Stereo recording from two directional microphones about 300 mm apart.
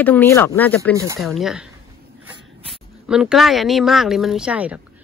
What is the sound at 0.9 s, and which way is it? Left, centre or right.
Speech, centre.